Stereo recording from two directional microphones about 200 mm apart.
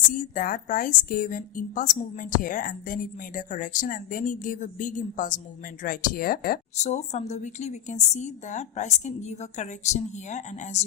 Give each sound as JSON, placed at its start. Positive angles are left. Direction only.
{"t": 0.1, "sound": "a woman's voice", "side_deg": 45}